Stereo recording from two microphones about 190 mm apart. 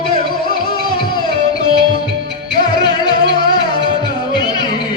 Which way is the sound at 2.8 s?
20° left (ahead or behind).